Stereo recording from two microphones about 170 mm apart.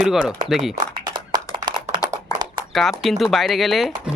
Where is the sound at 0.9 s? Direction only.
25° right (ahead or behind).